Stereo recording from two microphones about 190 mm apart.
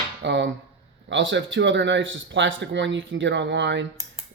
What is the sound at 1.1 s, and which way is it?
Speech, 75° right (ahead or behind).